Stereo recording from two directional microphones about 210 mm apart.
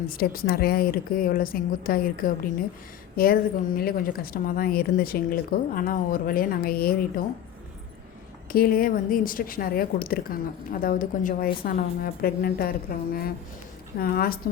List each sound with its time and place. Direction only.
0.1 s a woman's voice: 45° left (ahead or behind)
8.5 s a woman's voice: 45° left (ahead or behind)
14.0 s a woman's voice: 45° left (ahead or behind)